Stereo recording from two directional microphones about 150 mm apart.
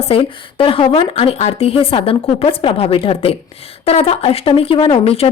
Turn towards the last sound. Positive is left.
turn(degrees=40)  # may be behind; listen again after turning